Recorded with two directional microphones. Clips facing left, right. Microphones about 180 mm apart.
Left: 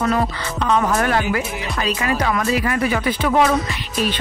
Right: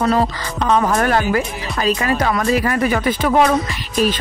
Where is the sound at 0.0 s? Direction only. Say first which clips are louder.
Right 3 dB; 35° right (ahead or behind).